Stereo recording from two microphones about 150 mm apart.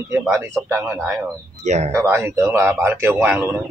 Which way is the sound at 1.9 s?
15° right (ahead or behind).